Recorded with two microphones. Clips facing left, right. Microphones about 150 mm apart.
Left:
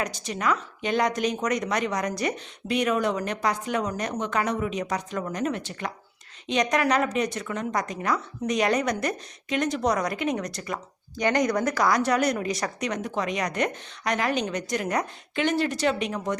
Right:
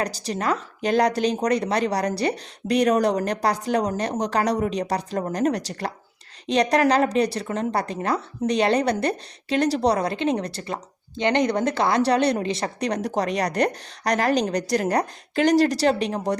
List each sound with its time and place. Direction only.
0.0 s a woman's voice: 35° right (ahead or behind)